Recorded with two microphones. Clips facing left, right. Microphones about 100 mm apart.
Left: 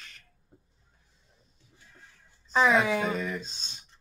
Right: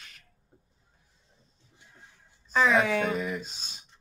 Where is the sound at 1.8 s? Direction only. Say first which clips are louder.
Even; 20° right (ahead or behind).